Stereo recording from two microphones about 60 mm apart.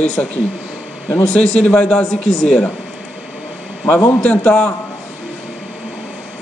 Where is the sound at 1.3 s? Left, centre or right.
Centre.